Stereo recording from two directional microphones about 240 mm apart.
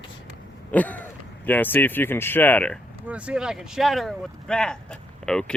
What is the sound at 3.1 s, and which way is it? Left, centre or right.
Speech, centre.